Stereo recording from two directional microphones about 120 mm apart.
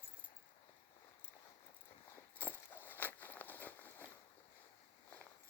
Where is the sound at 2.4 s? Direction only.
15° left (ahead or behind).